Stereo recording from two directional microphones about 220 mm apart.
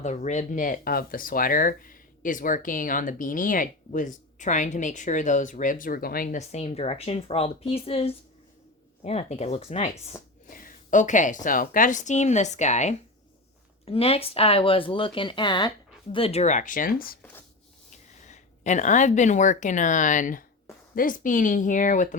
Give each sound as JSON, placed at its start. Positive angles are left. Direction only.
{"t": 0.0, "sound": "a woman's voice", "side_deg": 30}